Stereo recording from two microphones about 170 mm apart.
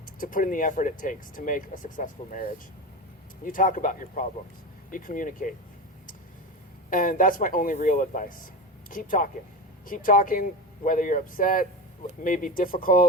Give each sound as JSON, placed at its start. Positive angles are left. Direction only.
{"t": 0.2, "sound": "speech", "side_deg": 50}
{"t": 6.9, "sound": "speech", "side_deg": 55}